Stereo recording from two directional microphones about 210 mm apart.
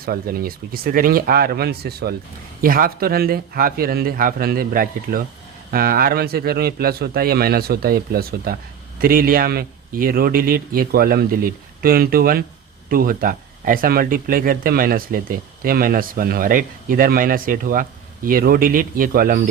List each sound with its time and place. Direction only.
0.0 s speech: 45° right (ahead or behind)